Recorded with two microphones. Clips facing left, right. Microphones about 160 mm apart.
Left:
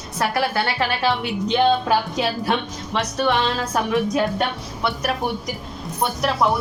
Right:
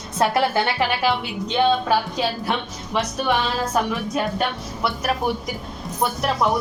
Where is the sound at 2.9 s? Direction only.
10° right (ahead or behind).